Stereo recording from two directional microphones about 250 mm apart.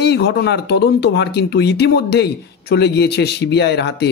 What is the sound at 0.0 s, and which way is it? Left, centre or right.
Speech, left.